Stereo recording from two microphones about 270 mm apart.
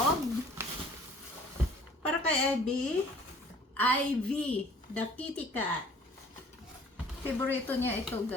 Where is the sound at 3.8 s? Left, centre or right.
Centre.